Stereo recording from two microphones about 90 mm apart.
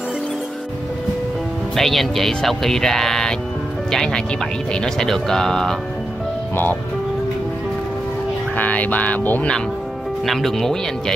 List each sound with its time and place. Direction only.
1.8 s speech: centre (ahead or behind)
6.5 s speech: 20° left (ahead or behind)
8.5 s speech: 15° left (ahead or behind)
10.2 s speech: centre (ahead or behind)